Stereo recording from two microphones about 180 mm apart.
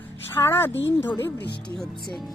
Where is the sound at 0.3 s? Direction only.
15° left (ahead or behind).